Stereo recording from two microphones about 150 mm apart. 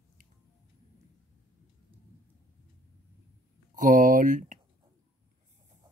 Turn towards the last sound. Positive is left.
turn(degrees=-60)  # may be behind; listen again after turning